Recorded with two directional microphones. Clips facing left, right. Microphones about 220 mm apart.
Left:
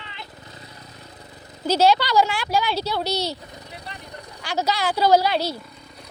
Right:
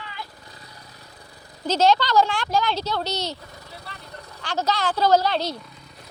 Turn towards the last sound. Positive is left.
turn(degrees=10)  # may be behind; listen again after turning